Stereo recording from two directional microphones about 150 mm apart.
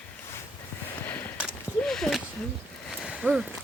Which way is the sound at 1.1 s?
10° left (ahead or behind).